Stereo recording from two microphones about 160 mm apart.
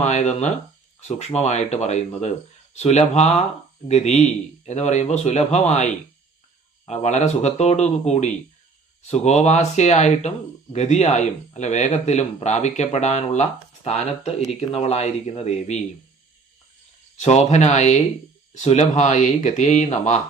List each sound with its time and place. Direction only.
0.0 s speech: 45° left (ahead or behind)
17.2 s speech: 45° left (ahead or behind)